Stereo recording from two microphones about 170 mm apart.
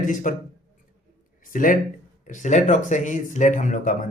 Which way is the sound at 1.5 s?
50° left (ahead or behind).